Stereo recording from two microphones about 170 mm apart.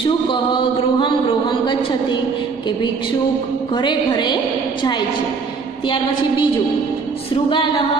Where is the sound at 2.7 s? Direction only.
25° left (ahead or behind).